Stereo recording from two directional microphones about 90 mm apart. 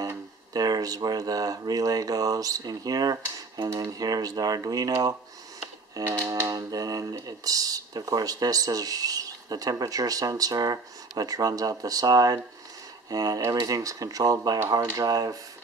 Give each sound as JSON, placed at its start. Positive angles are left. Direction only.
{"t": 0.5, "sound": "speech", "side_deg": -45}
{"t": 6.0, "sound": "speech", "side_deg": -30}